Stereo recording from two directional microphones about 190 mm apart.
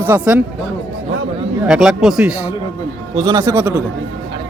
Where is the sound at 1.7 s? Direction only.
5° right (ahead or behind).